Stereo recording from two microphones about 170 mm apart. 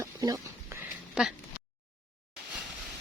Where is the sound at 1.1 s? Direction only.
5° right (ahead or behind).